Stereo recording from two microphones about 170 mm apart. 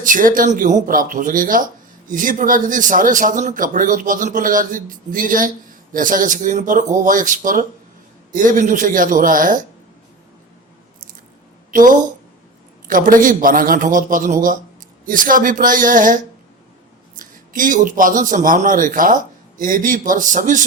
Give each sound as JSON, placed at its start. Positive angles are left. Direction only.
{"t": 0.0, "sound": "speech", "side_deg": -50}
{"t": 11.7, "sound": "speech", "side_deg": -50}
{"t": 17.2, "sound": "speech", "side_deg": -55}